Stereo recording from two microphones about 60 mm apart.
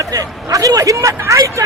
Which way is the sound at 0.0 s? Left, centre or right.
Right.